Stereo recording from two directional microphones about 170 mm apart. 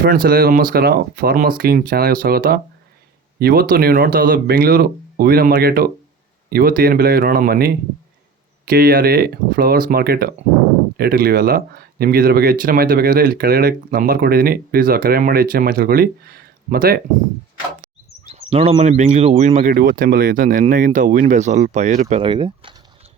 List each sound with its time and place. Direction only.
0.0 s speech: 60° right (ahead or behind)
18.3 s speech: 35° right (ahead or behind)
22.1 s speech: 30° right (ahead or behind)